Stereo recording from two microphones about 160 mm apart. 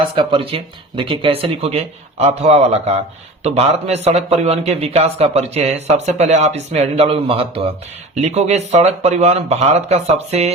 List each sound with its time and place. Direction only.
0.2 s a man's voice: 30° right (ahead or behind)